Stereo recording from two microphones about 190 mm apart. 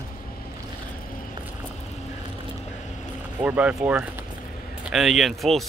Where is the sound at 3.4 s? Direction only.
5° right (ahead or behind).